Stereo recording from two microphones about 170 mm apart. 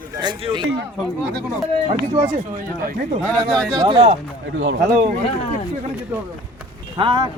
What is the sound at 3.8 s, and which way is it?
Speech, 30° right (ahead or behind).